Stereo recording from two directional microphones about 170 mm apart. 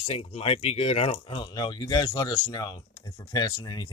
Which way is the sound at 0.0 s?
35° left (ahead or behind).